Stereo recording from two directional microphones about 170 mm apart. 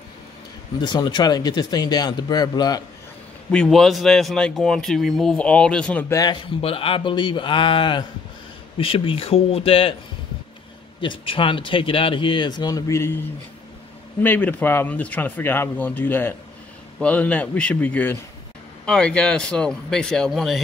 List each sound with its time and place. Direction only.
0.7 s speech: 25° left (ahead or behind)
3.4 s speech: 5° left (ahead or behind)
6.4 s speech: 35° left (ahead or behind)
11.0 s speech: 30° left (ahead or behind)
14.2 s speech: 10° left (ahead or behind)